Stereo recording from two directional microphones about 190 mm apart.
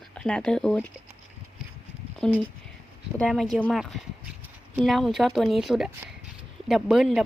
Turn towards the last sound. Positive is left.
turn(degrees=0)  # may be behind; listen again after turning